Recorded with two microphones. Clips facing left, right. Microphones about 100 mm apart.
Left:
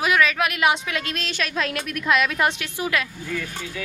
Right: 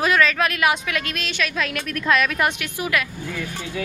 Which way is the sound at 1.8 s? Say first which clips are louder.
Right 2 dB; 10° left (ahead or behind).